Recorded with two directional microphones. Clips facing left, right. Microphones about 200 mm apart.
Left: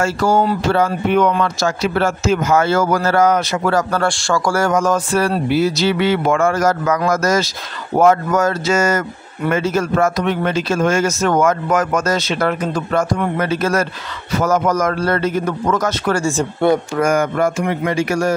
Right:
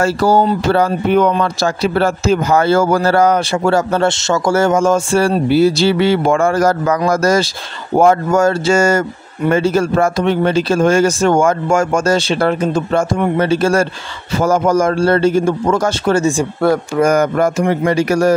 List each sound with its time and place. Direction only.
0.0 s a man's voice: 35° right (ahead or behind); by 16.4 s 20° right (ahead or behind)
17.0 s speech: 40° right (ahead or behind)